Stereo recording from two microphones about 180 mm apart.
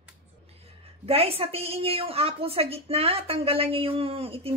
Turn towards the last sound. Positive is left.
turn(degrees=-30)  # may be behind; listen again after turning